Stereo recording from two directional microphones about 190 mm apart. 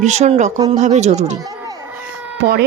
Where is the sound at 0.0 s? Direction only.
35° right (ahead or behind).